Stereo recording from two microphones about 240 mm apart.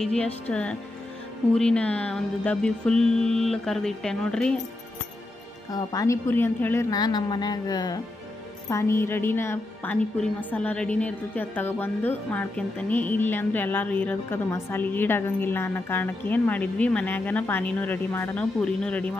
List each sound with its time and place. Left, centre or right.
0.0 s music: centre
5.7 s a woman's voice: centre